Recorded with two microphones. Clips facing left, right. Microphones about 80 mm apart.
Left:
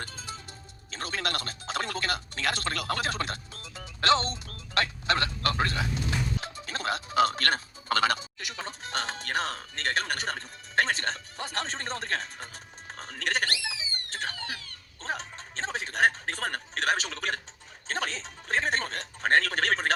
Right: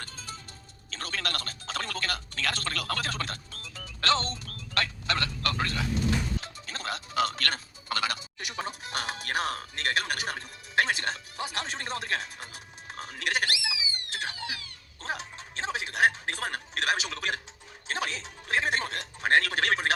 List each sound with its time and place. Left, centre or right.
0.0 s music: left
0.9 s speech: left
8.6 s speech: centre
15.0 s music: centre
17.8 s speech: centre